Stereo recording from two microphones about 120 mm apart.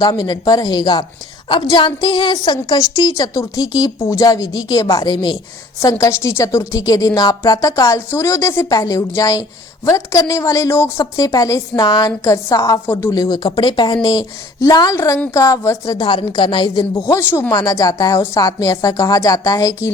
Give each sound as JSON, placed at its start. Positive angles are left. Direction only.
{"t": 0.0, "sound": "a woman's voice", "side_deg": 35}
{"t": 13.1, "sound": "a woman's voice", "side_deg": 30}
{"t": 16.0, "sound": "a woman's voice", "side_deg": 45}
{"t": 16.7, "sound": "a woman's voice", "side_deg": 25}